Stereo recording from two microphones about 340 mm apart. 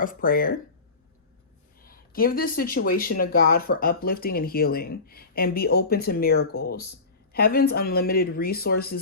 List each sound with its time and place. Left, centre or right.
0.0 s speech: left
1.8 s speech: left